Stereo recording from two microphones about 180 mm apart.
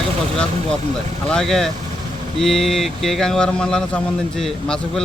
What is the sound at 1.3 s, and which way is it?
Speech, 5° left (ahead or behind).